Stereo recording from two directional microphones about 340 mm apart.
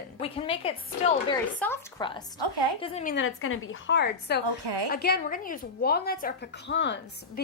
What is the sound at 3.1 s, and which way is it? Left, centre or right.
A woman's voice, left.